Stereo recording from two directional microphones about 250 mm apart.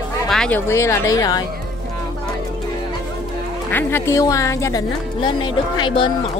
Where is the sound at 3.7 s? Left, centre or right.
Centre.